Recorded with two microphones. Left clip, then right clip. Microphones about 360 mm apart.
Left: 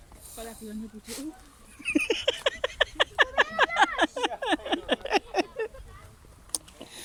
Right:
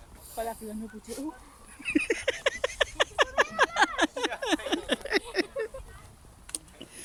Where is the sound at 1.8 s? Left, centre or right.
Centre.